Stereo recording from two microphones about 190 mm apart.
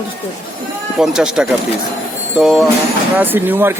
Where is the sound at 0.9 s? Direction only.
5° right (ahead or behind).